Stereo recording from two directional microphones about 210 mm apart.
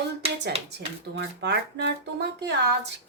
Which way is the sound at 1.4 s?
55° right (ahead or behind).